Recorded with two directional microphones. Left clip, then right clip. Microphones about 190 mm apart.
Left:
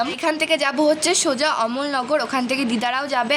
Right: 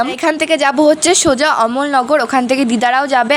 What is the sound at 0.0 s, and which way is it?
A woman's voice, 35° right (ahead or behind).